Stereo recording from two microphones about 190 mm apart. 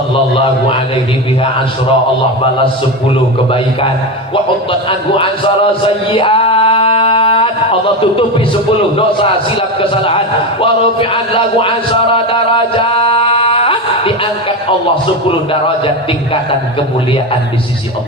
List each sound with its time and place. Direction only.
4.7 s a man's voice: 25° left (ahead or behind)
5.8 s a sound: 30° left (ahead or behind)
9.0 s a man's voice: 30° left (ahead or behind)
12.1 s music: 30° left (ahead or behind)